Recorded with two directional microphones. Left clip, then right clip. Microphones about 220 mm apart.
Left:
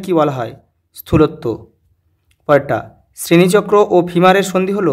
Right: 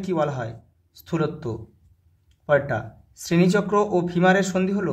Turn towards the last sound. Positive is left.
turn(degrees=40)  # may be behind; listen again after turning